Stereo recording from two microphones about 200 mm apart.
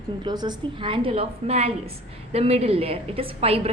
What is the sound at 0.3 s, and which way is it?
A woman's voice, 20° right (ahead or behind).